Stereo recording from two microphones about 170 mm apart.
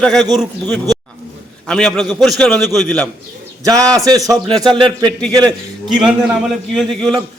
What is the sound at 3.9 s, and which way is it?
A man's voice, 20° right (ahead or behind).